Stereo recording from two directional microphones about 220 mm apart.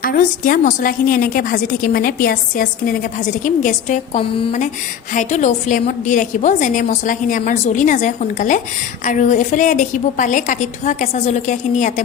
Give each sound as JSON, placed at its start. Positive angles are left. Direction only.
{"t": 0.0, "sound": "a woman's voice", "side_deg": 40}